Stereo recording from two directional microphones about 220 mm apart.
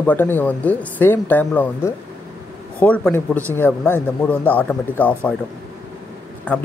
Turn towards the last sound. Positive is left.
turn(degrees=5)  # may be behind; listen again after turning